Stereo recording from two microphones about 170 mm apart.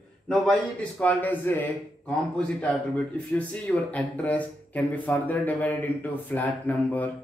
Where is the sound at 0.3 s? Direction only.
5° left (ahead or behind).